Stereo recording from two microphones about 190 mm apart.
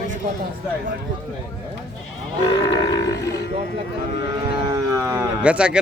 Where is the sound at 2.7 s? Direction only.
20° left (ahead or behind).